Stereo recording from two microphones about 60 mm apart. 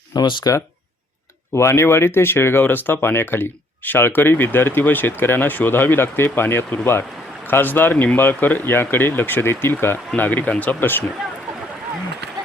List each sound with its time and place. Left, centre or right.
0.4 s speech: left
1.5 s speech: left
10.2 s speech: left